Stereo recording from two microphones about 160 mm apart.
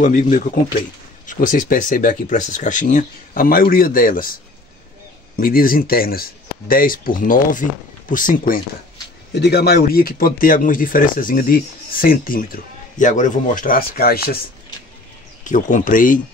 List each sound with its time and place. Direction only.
0.0 s speech: 50° left (ahead or behind)
9.3 s a man's voice: 90° left; by 14.4 s 75° left (ahead or behind)
15.4 s speech: 50° left (ahead or behind)